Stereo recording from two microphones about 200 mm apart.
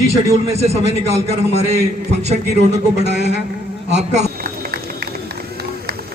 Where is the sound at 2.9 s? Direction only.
55° right (ahead or behind).